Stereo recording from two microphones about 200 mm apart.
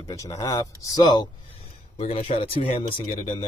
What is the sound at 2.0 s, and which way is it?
A man's voice, 30° left (ahead or behind).